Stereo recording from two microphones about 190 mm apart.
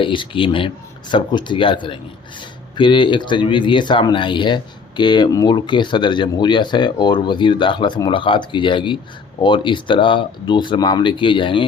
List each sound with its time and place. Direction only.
0.0 s speech: 25° left (ahead or behind)